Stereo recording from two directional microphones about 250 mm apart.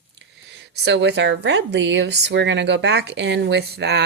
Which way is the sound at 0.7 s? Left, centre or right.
Right.